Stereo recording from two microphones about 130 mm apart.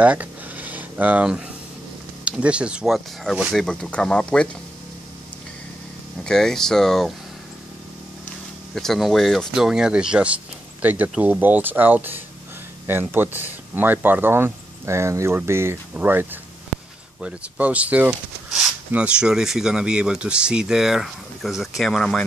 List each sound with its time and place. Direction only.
0.0 s a sound: 10° right (ahead or behind)
2.2 s speech: 10° right (ahead or behind); by 4.5 s 10° left (ahead or behind)
6.2 s speech: 5° left (ahead or behind)
8.7 s speech: centre (ahead or behind)